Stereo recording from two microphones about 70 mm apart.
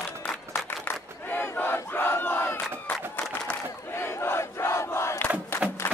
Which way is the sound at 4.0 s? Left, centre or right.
Left.